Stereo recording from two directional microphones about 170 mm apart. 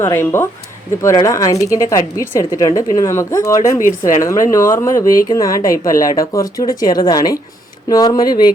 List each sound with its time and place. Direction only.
0.0 s speech: 15° left (ahead or behind)